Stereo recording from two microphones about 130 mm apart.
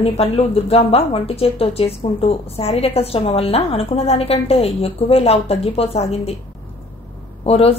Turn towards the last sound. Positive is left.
turn(degrees=50)  # may be behind; listen again after turning